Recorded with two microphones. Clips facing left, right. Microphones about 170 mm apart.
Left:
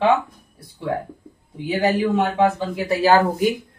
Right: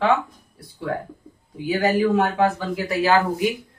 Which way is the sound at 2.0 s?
20° left (ahead or behind).